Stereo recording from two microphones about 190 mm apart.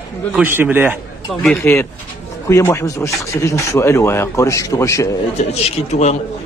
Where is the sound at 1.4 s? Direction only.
10° left (ahead or behind).